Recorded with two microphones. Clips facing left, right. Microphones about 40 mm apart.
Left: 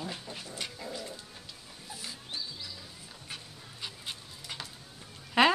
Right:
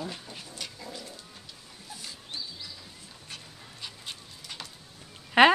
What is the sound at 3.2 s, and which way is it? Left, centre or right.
Dog, centre.